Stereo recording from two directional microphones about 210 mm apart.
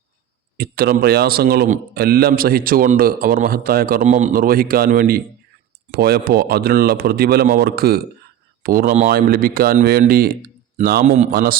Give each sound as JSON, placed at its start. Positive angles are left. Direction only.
{"t": 0.5, "sound": "a man's voice", "side_deg": -50}
{"t": 11.3, "sound": "speech", "side_deg": -45}